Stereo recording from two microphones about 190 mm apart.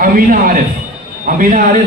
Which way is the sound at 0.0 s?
45° right (ahead or behind).